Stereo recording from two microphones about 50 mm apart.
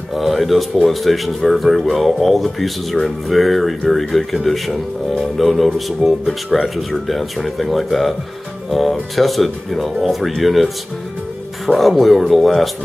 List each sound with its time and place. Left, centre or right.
0.1 s speech: centre